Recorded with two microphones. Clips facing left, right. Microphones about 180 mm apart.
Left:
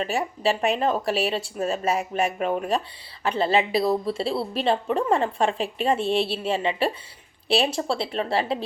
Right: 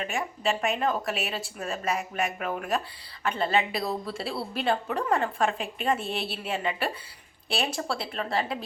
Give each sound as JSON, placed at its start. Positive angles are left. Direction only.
{"t": 0.0, "sound": "speech", "side_deg": 35}